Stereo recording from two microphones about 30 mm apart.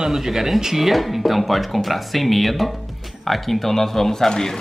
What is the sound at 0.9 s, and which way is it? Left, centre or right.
Speech, centre.